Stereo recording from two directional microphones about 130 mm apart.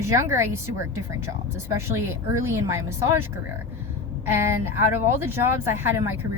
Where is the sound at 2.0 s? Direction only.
20° right (ahead or behind).